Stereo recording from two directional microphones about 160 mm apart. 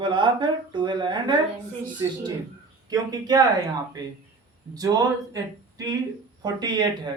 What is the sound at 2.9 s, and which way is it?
Speech, 25° right (ahead or behind).